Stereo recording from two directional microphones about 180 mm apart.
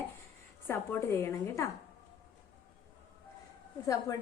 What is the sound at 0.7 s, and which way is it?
A woman's voice, 15° left (ahead or behind).